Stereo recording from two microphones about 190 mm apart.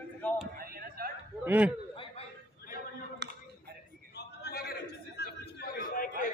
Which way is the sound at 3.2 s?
65° right (ahead or behind).